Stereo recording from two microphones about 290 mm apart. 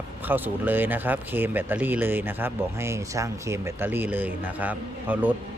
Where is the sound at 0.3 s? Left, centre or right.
Centre.